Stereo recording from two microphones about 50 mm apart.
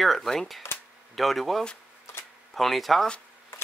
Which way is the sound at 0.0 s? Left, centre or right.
Centre.